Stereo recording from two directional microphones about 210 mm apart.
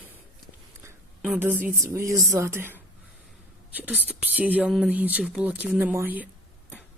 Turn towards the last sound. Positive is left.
turn(degrees=-10)  # may be behind; listen again after turning